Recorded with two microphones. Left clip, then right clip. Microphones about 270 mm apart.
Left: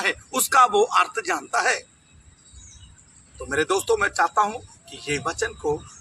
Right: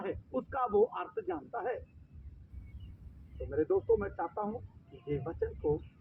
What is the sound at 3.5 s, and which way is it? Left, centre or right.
Speech, left.